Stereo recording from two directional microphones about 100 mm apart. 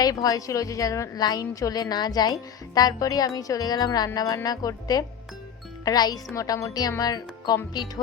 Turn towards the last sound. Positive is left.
turn(degrees=40)  # may be behind; listen again after turning